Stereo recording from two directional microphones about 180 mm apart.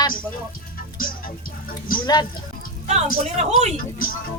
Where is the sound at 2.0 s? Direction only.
25° left (ahead or behind).